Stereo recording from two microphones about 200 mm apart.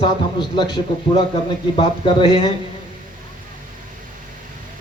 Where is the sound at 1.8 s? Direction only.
25° left (ahead or behind).